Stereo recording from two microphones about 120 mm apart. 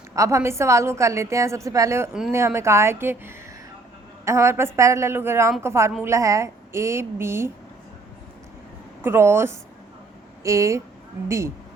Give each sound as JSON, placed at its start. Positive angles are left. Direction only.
{"t": 0.2, "sound": "a woman's voice", "side_deg": -25}
{"t": 9.0, "sound": "a woman's voice", "side_deg": -20}